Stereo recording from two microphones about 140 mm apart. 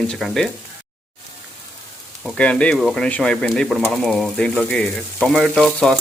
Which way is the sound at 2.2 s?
5° left (ahead or behind).